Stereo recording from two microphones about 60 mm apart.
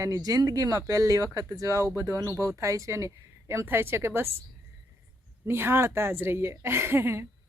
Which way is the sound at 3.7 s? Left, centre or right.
Right.